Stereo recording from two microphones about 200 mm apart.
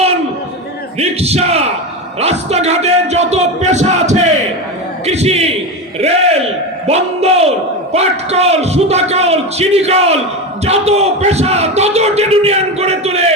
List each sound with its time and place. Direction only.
0.9 s speech: 30° right (ahead or behind)
6.8 s speech: 30° right (ahead or behind)